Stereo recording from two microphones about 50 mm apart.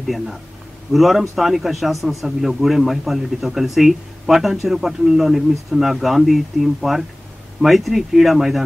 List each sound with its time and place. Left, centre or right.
0.0 s speech: centre